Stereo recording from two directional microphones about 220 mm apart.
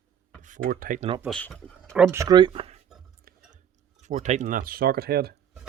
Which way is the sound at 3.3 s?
40° right (ahead or behind).